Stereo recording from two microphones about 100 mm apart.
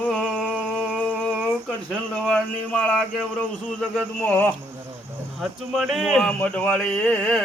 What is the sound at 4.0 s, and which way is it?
Speech, 15° left (ahead or behind).